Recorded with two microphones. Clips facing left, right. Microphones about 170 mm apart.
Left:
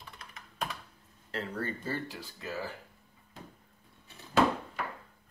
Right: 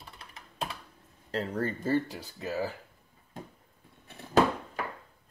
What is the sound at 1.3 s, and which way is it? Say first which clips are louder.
Speech: right 5 dB; 40° right (ahead or behind).